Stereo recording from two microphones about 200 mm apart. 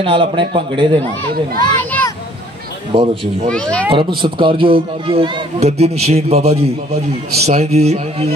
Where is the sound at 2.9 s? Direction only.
30° right (ahead or behind).